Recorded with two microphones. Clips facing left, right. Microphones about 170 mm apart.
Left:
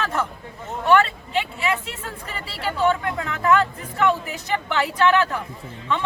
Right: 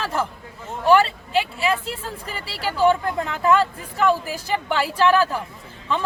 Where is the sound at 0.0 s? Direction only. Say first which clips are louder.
Even; 30° right (ahead or behind).